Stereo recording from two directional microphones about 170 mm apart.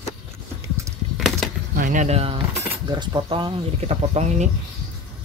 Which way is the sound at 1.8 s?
45° right (ahead or behind).